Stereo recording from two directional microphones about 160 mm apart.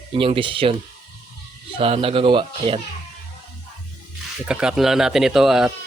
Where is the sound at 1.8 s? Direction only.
35° right (ahead or behind).